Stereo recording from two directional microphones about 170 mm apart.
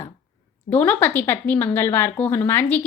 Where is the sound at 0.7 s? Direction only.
10° left (ahead or behind).